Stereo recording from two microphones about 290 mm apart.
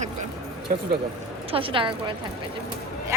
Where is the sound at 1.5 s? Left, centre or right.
Centre.